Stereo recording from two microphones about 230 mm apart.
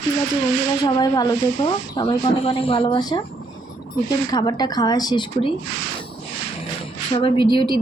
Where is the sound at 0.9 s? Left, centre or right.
Centre.